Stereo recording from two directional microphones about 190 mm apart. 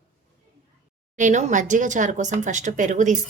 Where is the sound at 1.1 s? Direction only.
40° right (ahead or behind).